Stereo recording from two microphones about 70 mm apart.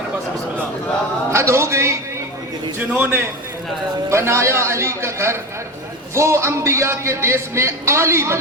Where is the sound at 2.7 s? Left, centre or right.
Right.